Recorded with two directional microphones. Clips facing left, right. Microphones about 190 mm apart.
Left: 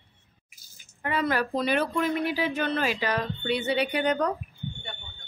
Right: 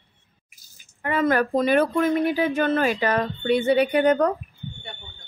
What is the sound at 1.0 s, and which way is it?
Speech, 50° right (ahead or behind).